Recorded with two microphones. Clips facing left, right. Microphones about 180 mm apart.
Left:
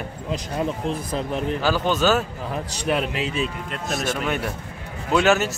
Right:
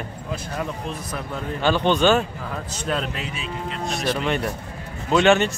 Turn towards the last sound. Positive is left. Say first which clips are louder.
# right 2 dB
turn(degrees=0)  # may be behind; listen again after turning